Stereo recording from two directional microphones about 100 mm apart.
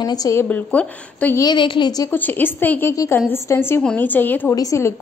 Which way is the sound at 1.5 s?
50° left (ahead or behind).